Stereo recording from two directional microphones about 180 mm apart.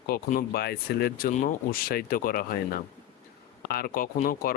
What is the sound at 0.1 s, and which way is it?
Speech, 55° left (ahead or behind).